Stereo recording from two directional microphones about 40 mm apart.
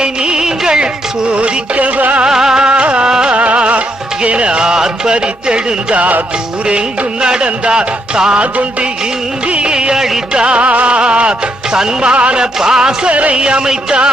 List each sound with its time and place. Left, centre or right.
0.0 s music: centre
1.3 s music: right
2.2 s music: centre
2.6 s music: right
3.3 s music: right
8.4 s music: right
9.5 s music of bollywood: right
10.3 s music: right
12.4 s music: centre
13.1 s music: right